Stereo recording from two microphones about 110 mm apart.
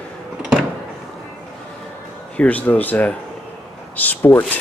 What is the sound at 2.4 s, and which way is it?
Speech, 15° left (ahead or behind).